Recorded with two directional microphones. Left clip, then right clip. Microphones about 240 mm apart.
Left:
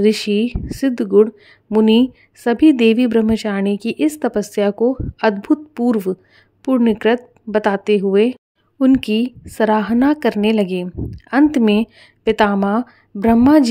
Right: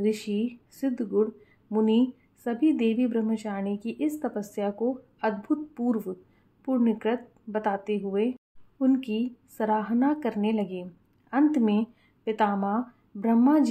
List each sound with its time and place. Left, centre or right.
0.0 s speech: left